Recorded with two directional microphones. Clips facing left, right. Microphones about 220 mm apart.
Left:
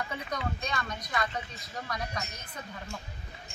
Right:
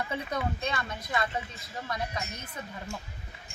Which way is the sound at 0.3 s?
25° right (ahead or behind).